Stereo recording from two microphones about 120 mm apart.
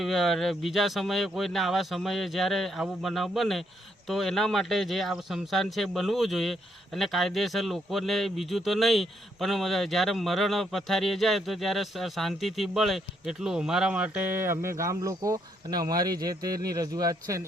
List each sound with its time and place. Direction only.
0.0 s speech: centre (ahead or behind); by 17.4 s 30° right (ahead or behind)